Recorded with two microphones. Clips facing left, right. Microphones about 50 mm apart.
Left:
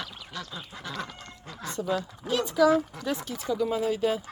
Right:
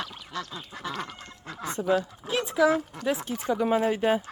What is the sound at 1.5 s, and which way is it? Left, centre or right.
Speech, right.